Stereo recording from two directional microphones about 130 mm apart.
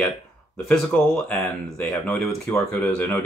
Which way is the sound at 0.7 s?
5° left (ahead or behind).